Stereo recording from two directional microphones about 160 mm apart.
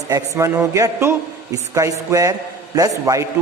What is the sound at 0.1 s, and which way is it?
A man's voice, 15° right (ahead or behind).